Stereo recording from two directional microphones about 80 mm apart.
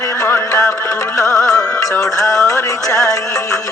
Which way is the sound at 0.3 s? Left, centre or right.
Left.